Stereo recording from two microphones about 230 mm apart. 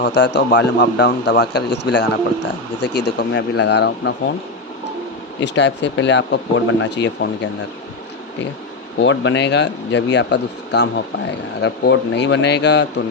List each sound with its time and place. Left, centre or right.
0.0 s a man's voice: left
5.4 s a man's voice: left
9.0 s a man's voice: left